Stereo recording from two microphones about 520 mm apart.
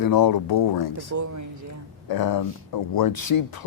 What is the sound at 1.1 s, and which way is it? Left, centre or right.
Speech, right.